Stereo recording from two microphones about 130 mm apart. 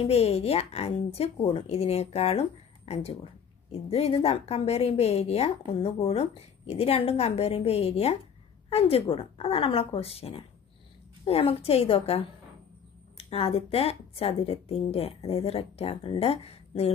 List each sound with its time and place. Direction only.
0.0 s a woman's voice: 50° left (ahead or behind)